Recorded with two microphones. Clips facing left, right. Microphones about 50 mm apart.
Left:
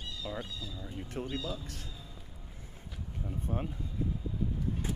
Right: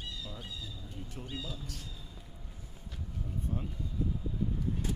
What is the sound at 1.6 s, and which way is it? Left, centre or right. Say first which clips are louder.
Speech: even; left.